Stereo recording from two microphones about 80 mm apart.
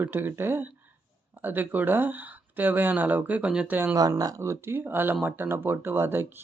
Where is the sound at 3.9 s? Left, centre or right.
Right.